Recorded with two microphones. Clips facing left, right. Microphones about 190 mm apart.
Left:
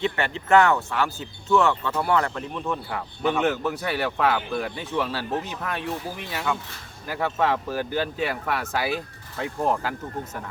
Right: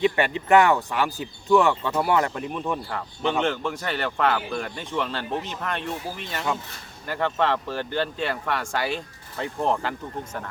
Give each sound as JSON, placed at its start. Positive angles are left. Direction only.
{"t": 0.0, "sound": "speech", "side_deg": -15}
{"t": 3.4, "sound": "speech", "side_deg": 5}
{"t": 7.1, "sound": "speech", "side_deg": 5}